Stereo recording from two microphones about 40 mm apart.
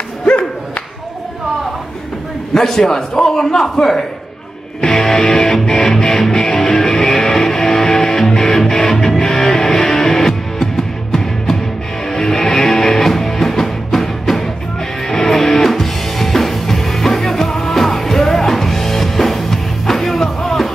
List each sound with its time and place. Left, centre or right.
0.2 s a sound: left
2.5 s a man's voice: centre
4.9 s music: centre